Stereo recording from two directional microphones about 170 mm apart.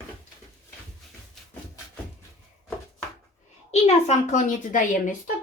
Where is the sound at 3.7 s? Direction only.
40° left (ahead or behind).